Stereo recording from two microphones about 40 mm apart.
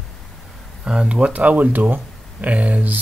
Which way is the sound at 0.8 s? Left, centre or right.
Right.